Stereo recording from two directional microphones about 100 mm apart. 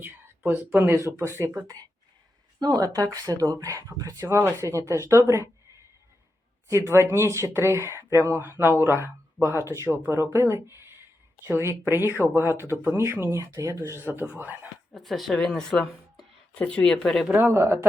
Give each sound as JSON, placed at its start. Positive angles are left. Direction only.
{"t": 0.0, "sound": "speech", "side_deg": -20}
{"t": 1.6, "sound": "speech", "side_deg": -40}
{"t": 6.8, "sound": "speech", "side_deg": -25}
{"t": 14.0, "sound": "speech", "side_deg": -20}
{"t": 14.9, "sound": "speech", "side_deg": 0}
{"t": 17.2, "sound": "speech", "side_deg": -20}